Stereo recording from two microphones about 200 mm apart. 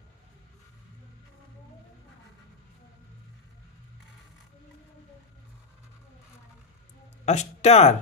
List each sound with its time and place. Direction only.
7.2 s speech: 35° left (ahead or behind)